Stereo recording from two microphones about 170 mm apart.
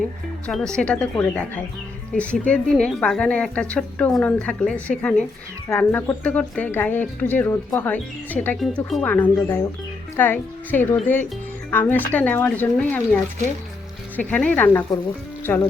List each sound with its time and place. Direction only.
0.4 s speech: 5° left (ahead or behind)
14.2 s speech: 10° left (ahead or behind)